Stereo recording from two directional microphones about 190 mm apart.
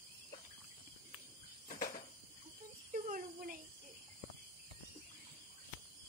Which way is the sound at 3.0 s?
45° right (ahead or behind).